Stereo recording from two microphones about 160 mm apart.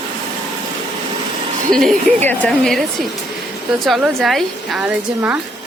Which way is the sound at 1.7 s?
10° left (ahead or behind).